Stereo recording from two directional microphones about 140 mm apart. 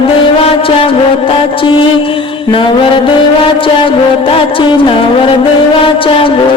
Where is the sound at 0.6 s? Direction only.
40° left (ahead or behind).